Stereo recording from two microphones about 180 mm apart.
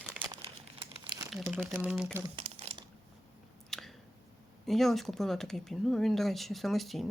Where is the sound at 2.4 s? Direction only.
35° right (ahead or behind).